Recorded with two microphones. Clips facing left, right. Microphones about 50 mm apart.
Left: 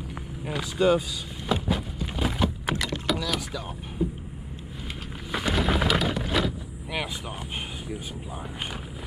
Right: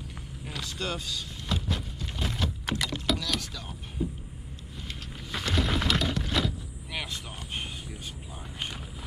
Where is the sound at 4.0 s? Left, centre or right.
Centre.